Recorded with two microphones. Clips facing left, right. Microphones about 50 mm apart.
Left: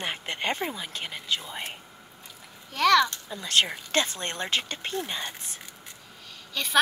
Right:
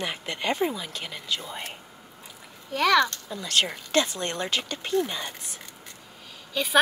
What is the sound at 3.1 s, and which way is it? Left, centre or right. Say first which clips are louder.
Speech: right 2 dB; centre.